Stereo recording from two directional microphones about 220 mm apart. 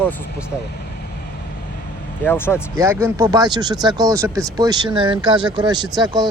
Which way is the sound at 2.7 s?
15° right (ahead or behind).